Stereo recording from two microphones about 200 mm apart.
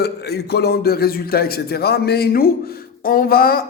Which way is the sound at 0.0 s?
55° left (ahead or behind).